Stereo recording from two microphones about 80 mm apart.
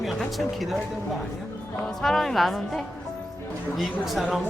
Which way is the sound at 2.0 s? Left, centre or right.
Centre.